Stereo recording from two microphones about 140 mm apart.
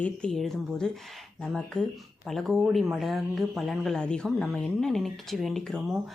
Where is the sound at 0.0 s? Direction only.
5° left (ahead or behind).